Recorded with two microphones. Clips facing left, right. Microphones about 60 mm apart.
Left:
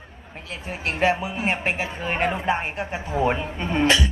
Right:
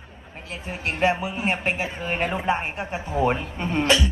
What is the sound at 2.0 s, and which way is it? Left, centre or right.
Speech, left.